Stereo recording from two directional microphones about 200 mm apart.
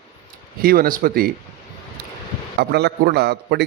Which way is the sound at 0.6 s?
50° right (ahead or behind).